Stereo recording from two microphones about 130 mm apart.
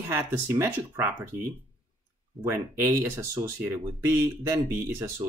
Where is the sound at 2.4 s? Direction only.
20° right (ahead or behind).